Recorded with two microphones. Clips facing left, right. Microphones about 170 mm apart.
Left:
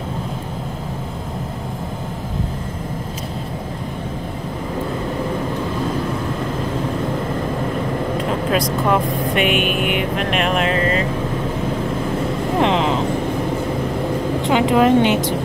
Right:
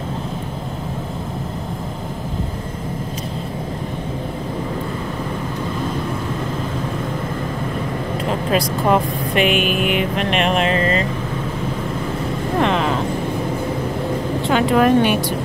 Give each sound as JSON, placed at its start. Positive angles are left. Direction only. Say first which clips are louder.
{"t": 8.5, "sound": "speech", "louder": "right 2 dB", "side_deg": 0}
{"t": 12.5, "sound": "vehicle", "louder": "left 1 dB", "side_deg": 20}
{"t": 14.4, "sound": "a woman's voice", "louder": "even", "side_deg": 20}